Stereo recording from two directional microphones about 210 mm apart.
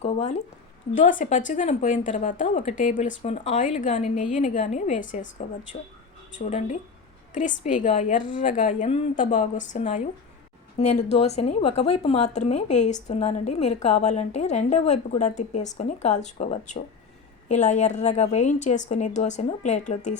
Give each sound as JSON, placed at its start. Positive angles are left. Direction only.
{"t": 0.0, "sound": "a woman's voice", "side_deg": 30}